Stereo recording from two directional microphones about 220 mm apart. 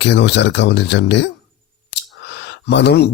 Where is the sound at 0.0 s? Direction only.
50° left (ahead or behind).